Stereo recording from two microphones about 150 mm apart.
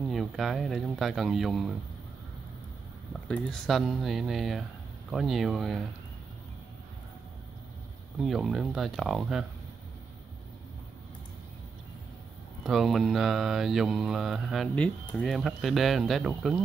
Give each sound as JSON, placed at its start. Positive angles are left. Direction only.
{"t": 0.0, "sound": "mantra", "side_deg": 0}
{"t": 3.1, "sound": "mantra", "side_deg": 5}
{"t": 8.2, "sound": "mantra", "side_deg": 0}
{"t": 12.6, "sound": "mantra", "side_deg": 0}